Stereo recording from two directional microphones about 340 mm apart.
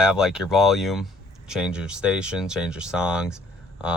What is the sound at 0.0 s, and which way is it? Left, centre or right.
Speech, centre.